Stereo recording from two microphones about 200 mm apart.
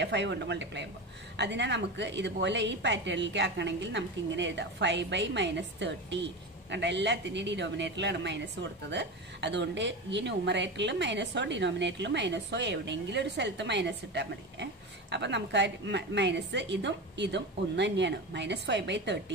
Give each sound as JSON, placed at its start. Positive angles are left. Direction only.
{"t": 0.0, "sound": "speech", "side_deg": -60}